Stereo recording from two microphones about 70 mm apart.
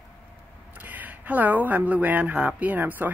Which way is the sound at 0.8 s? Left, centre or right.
Right.